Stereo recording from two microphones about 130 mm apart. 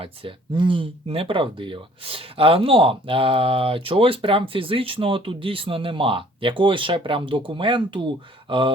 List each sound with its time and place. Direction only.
0.0 s speech: 40° right (ahead or behind)